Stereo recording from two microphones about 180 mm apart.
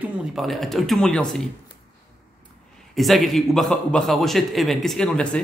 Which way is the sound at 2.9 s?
Centre (ahead or behind).